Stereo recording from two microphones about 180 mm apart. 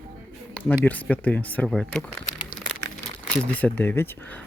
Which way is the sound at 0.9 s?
10° left (ahead or behind).